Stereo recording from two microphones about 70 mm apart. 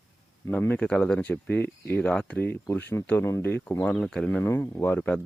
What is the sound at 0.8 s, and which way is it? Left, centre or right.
Speech, centre.